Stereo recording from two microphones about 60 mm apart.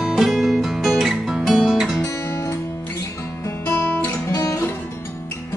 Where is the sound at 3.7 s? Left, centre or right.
Left.